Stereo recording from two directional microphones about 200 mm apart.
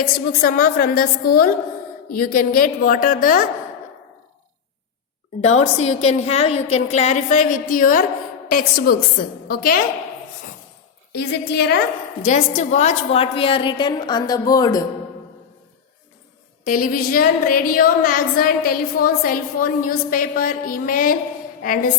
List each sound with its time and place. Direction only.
0.0 s a woman's voice: 45° left (ahead or behind)
5.6 s a woman's voice: 35° left (ahead or behind)
11.1 s a woman's voice: 55° left (ahead or behind)
12.2 s a woman's voice: 35° left (ahead or behind); by 14.8 s 20° left (ahead or behind)
16.6 s a woman's voice: 45° left (ahead or behind)